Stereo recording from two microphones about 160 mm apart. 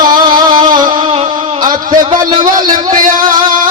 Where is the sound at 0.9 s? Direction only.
35° right (ahead or behind).